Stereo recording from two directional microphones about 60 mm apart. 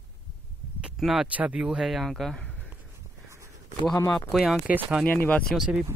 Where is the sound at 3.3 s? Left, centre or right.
Right.